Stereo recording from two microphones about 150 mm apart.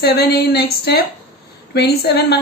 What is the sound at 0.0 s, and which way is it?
A woman's voice, 90° left.